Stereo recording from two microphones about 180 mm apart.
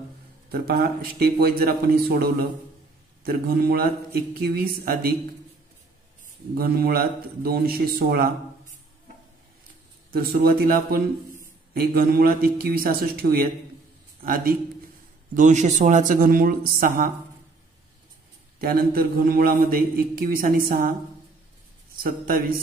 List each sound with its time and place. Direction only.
0.5 s a man's voice: 60° right (ahead or behind)
6.5 s a man's voice: 55° right (ahead or behind)
10.1 s a man's voice: 60° right (ahead or behind)
15.3 s a man's voice: 40° right (ahead or behind)
18.6 s a man's voice: 55° right (ahead or behind)
22.0 s a man's voice: 50° right (ahead or behind)